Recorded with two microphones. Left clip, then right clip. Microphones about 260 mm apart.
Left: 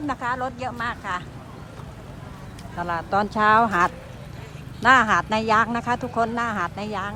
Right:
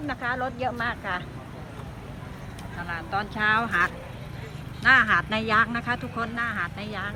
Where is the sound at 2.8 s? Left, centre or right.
Centre.